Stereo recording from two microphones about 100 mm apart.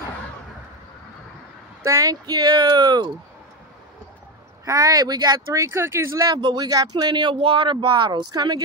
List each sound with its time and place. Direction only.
1.9 s speech: 35° right (ahead or behind)
4.6 s speech: 40° right (ahead or behind)
6.3 s speech: 45° right (ahead or behind)
7.3 s speech: 65° right (ahead or behind); by 8.6 s 45° right (ahead or behind)